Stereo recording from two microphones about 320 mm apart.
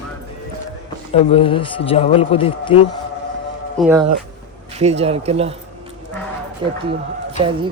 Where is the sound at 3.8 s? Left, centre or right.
Centre.